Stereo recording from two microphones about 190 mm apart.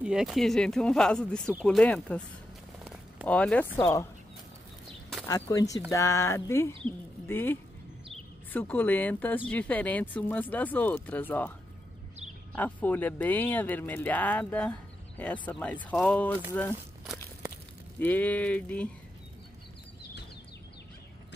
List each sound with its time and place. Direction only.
0.0 s speech: 5° right (ahead or behind)
2.8 s a sound: centre (ahead or behind)
3.3 s speech: 5° left (ahead or behind)
5.3 s speech: 20° left (ahead or behind)
12.5 s speech: 10° left (ahead or behind)
17.1 s a sound: 5° right (ahead or behind)
17.9 s speech: 10° left (ahead or behind)